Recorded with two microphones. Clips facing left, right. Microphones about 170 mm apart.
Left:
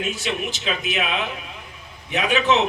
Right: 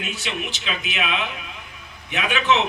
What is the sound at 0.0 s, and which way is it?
A man's voice, 40° left (ahead or behind).